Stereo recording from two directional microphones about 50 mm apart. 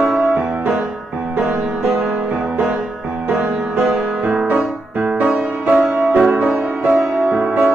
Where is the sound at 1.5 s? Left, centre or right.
Centre.